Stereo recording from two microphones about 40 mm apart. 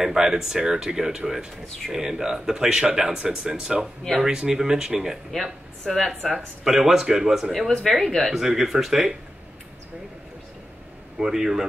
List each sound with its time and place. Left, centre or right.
0.0 s speech: centre
5.3 s speech: centre
6.2 s speech: centre
8.0 s speech: centre
8.3 s speech: centre
11.1 s speech: centre